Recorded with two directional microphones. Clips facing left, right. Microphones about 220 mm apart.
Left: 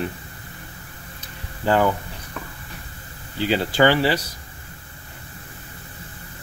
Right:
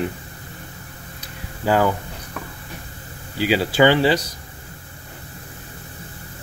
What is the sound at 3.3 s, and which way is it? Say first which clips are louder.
Speech: right 2 dB; 10° right (ahead or behind).